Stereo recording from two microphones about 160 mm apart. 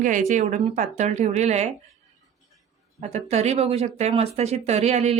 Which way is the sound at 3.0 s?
40° right (ahead or behind).